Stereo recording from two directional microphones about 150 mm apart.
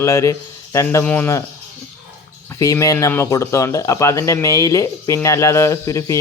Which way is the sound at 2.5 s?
20° left (ahead or behind).